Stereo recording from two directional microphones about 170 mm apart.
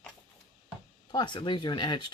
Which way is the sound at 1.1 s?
25° left (ahead or behind).